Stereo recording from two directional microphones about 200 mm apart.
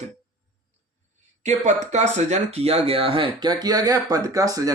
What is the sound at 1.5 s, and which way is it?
Speech, 35° right (ahead or behind).